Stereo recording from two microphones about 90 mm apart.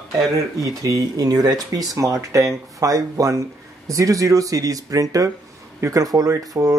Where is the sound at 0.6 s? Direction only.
40° right (ahead or behind).